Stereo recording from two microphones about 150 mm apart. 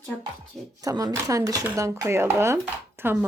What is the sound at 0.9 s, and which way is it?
Speech, 25° right (ahead or behind).